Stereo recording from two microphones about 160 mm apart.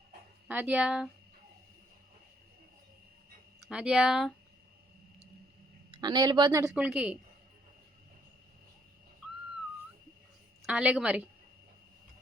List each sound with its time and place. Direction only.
0.4 s speech: 10° right (ahead or behind)
3.7 s speech: 5° right (ahead or behind)
5.9 s speech: 25° right (ahead or behind)
6.8 s speech: 5° right (ahead or behind)
10.6 s a woman's voice: 5° right (ahead or behind)